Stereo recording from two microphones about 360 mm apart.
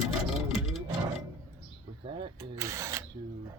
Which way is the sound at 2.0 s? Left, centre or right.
Centre.